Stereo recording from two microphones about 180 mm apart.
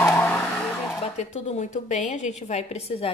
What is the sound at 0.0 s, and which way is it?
Vehicle, 10° left (ahead or behind).